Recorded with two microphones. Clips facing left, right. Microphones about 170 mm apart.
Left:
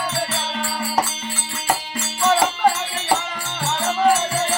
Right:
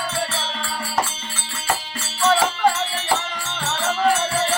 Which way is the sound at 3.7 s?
15° left (ahead or behind).